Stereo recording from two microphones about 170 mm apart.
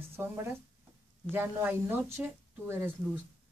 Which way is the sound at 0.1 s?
15° right (ahead or behind).